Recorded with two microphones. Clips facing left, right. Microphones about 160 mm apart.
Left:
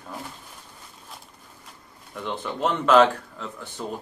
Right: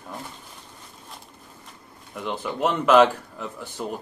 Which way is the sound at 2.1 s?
5° right (ahead or behind).